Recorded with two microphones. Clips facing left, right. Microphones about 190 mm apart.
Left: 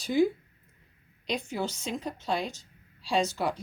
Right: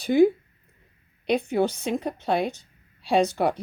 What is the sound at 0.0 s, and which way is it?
Speech, 60° right (ahead or behind).